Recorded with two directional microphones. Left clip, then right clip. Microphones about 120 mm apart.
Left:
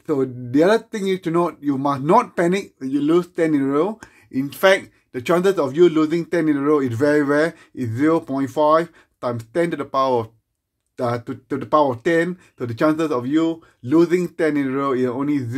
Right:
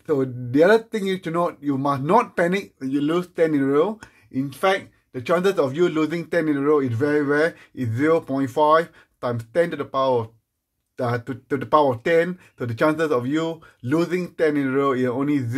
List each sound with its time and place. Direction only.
0.0 s speech: 30° left (ahead or behind)
4.3 s speech: 50° left (ahead or behind)
5.4 s speech: 25° left (ahead or behind)
6.8 s speech: 55° left (ahead or behind)
7.3 s speech: 30° left (ahead or behind)
9.8 s speech: 45° left (ahead or behind)
11.0 s speech: 30° left (ahead or behind)
13.4 s speech: centre (ahead or behind)
14.2 s speech: 35° left (ahead or behind)
14.5 s speech: 20° left (ahead or behind)